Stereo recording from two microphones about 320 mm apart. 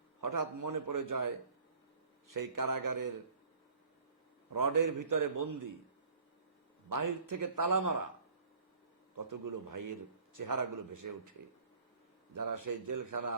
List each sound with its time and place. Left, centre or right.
0.2 s a man's voice: right
4.5 s a man's voice: right
6.9 s a man's voice: right
9.1 s a man's voice: right
12.3 s a man's voice: right